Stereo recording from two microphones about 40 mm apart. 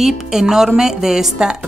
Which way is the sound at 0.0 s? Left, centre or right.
Centre.